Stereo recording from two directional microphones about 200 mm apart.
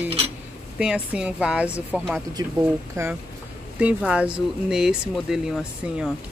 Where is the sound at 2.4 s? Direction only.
20° right (ahead or behind); by 6.1 s 5° right (ahead or behind).